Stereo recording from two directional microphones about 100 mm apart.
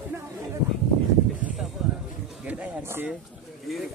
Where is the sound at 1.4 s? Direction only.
5° right (ahead or behind); by 3.1 s 20° right (ahead or behind).